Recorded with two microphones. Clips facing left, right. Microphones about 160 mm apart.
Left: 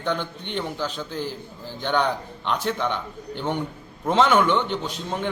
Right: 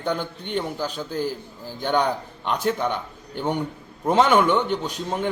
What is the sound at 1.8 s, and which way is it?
Speech, 10° right (ahead or behind).